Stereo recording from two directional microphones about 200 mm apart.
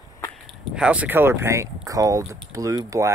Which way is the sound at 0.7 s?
5° right (ahead or behind).